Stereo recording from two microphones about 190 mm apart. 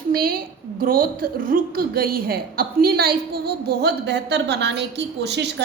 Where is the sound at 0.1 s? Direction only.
50° right (ahead or behind).